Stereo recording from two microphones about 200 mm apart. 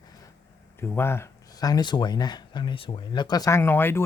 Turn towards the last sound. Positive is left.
turn(degrees=10)  # may be behind; listen again after turning